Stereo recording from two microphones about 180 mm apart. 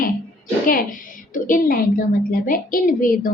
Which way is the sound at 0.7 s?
50° left (ahead or behind).